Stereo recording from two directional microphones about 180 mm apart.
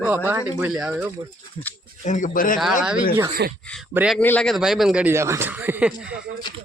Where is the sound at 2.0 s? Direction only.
45° left (ahead or behind).